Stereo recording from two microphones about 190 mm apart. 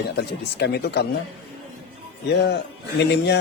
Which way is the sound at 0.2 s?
60° left (ahead or behind).